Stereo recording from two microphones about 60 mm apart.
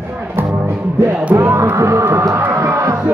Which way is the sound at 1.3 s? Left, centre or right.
Right.